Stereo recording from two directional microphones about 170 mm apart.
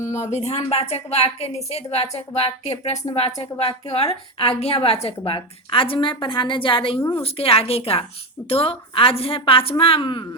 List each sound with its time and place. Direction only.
0.0 s a woman's voice: 45° left (ahead or behind)